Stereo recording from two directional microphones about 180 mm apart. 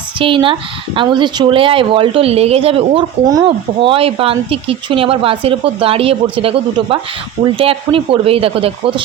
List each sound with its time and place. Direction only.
0.2 s a woman's voice: 30° right (ahead or behind)